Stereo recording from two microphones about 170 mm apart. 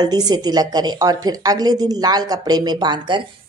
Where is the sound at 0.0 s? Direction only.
25° right (ahead or behind).